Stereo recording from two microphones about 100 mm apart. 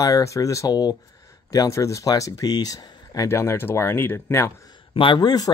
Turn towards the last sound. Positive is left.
turn(degrees=40)  # may be behind; listen again after turning